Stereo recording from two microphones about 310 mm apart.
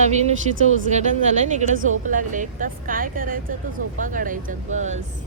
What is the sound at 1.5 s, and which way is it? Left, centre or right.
Speech, right.